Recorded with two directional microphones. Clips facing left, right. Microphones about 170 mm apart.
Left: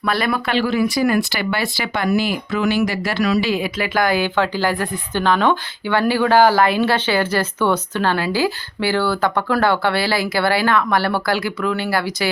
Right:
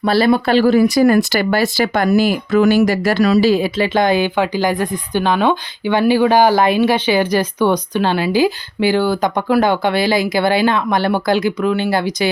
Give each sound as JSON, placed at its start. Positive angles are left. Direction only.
{"t": 0.0, "sound": "speech", "side_deg": -30}